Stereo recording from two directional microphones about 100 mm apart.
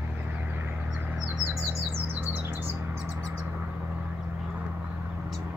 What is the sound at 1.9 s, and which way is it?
Bird, 20° right (ahead or behind).